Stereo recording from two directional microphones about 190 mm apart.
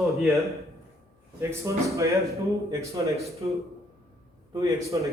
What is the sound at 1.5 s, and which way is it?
Speech, 15° right (ahead or behind).